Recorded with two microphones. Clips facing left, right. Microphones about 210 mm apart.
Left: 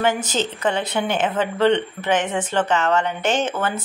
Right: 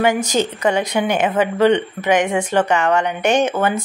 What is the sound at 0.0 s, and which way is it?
Speech, 10° right (ahead or behind).